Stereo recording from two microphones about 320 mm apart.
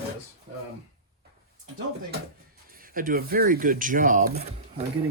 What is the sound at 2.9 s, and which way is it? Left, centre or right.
Speech, right.